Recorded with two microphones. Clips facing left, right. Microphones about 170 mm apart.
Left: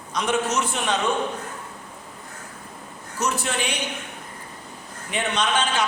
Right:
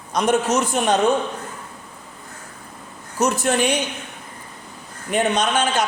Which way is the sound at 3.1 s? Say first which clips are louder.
Right 7 dB; 45° right (ahead or behind).